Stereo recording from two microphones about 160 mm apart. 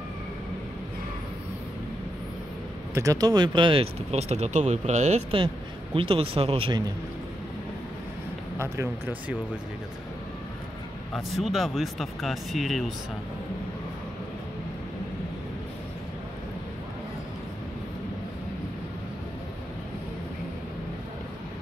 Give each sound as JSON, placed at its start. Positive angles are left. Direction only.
{"t": 2.9, "sound": "speech", "side_deg": -20}
{"t": 5.9, "sound": "speech", "side_deg": -35}
{"t": 8.5, "sound": "speech", "side_deg": -15}
{"t": 11.1, "sound": "speech", "side_deg": 0}